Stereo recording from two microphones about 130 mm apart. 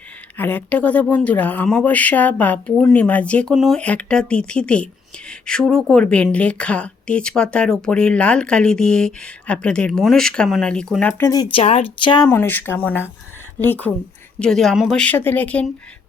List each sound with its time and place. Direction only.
0.3 s speech: 15° left (ahead or behind)
11.2 s speech: 30° left (ahead or behind)
11.4 s speech: 45° left (ahead or behind)
12.3 s speech: 15° left (ahead or behind)